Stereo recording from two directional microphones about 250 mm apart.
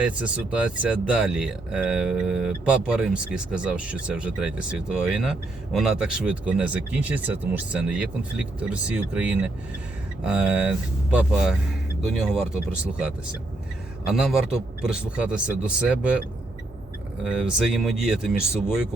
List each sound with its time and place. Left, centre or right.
0.0 s speech: centre
17.2 s speech: centre